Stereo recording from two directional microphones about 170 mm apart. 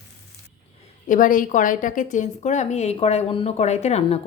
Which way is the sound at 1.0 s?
50° left (ahead or behind).